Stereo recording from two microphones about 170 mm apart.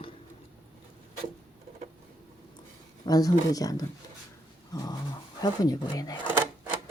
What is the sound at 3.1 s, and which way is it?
Speech, 20° left (ahead or behind).